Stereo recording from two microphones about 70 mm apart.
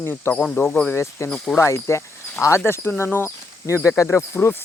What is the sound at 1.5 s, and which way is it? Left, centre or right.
Speech, left.